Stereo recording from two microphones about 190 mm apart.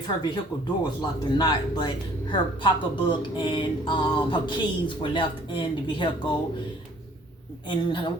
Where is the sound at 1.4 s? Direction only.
20° left (ahead or behind).